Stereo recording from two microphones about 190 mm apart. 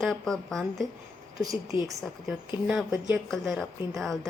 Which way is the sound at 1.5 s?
15° right (ahead or behind).